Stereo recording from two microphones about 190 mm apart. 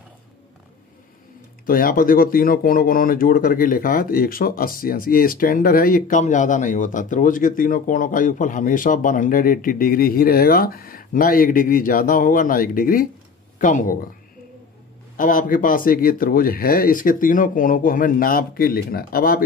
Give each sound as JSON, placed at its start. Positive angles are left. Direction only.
{"t": 1.7, "sound": "speech", "side_deg": 50}
{"t": 15.1, "sound": "speech", "side_deg": 45}